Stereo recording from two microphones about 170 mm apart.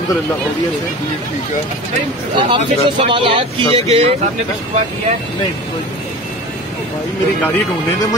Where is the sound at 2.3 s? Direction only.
30° right (ahead or behind).